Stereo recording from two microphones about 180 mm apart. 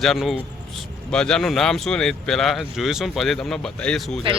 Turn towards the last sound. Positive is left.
turn(degrees=0)  # may be behind; listen again after turning